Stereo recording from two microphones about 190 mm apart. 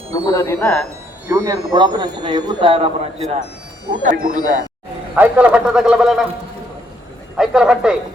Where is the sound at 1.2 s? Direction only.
15° right (ahead or behind).